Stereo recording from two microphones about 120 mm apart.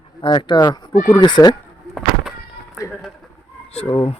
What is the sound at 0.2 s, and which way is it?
Speech, 40° left (ahead or behind).